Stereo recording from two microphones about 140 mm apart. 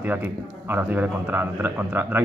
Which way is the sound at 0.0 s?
15° right (ahead or behind).